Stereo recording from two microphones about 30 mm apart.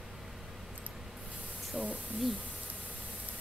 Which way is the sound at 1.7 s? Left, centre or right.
Centre.